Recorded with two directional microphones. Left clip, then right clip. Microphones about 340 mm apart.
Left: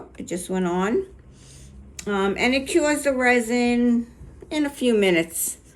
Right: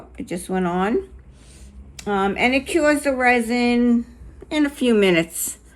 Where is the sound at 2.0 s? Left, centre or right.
Centre.